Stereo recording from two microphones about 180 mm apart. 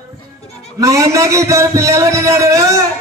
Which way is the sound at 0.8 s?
15° right (ahead or behind).